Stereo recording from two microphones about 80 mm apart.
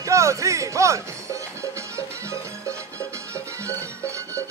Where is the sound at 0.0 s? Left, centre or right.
Right.